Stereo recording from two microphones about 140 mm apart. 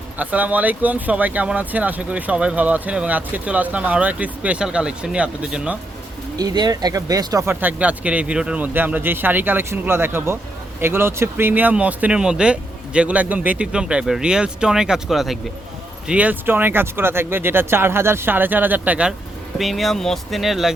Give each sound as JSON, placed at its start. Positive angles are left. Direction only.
{"t": 0.2, "sound": "speech", "side_deg": -10}
{"t": 6.3, "sound": "speech", "side_deg": -30}
{"t": 7.4, "sound": "speech", "side_deg": -15}